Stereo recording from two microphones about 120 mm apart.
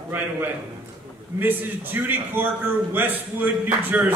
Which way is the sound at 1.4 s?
15° right (ahead or behind).